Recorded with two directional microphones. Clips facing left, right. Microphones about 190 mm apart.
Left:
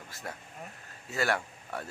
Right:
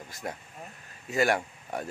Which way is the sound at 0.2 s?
20° right (ahead or behind).